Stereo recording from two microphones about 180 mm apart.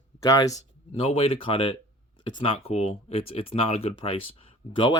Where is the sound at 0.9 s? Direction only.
35° left (ahead or behind).